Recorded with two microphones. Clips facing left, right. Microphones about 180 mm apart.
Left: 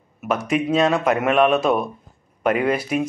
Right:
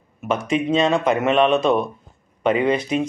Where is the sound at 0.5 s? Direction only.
5° left (ahead or behind).